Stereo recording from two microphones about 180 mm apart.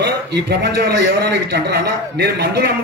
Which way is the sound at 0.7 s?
60° right (ahead or behind).